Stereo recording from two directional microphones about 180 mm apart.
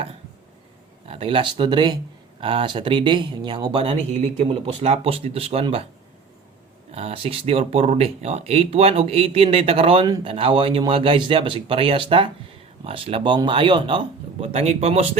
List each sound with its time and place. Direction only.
1.0 s speech: 30° right (ahead or behind)
6.9 s speech: 35° right (ahead or behind)